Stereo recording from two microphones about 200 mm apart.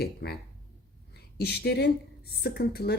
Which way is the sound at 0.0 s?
55° left (ahead or behind).